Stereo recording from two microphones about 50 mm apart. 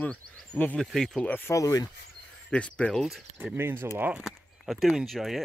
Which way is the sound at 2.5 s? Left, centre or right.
Left.